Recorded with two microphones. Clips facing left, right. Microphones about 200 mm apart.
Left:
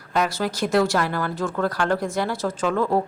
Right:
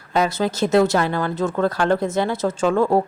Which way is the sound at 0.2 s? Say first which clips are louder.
Right 4 dB; 20° right (ahead or behind).